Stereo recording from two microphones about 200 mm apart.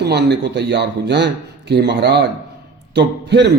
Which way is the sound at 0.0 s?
55° right (ahead or behind).